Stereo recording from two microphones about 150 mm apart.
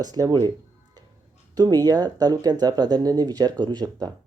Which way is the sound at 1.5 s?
25° right (ahead or behind).